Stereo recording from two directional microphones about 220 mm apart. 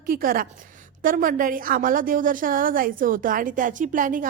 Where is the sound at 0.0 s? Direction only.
40° right (ahead or behind).